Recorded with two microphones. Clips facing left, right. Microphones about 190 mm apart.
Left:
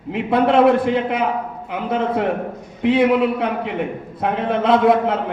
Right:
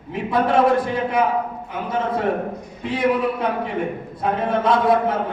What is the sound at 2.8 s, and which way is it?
A man's voice, 60° left (ahead or behind).